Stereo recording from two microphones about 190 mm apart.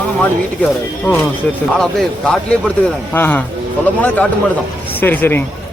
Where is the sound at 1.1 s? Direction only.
10° left (ahead or behind).